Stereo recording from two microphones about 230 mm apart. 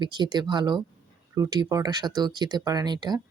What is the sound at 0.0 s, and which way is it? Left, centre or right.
Speech, centre.